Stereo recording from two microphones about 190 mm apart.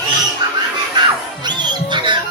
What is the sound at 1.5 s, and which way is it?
Music, 25° right (ahead or behind).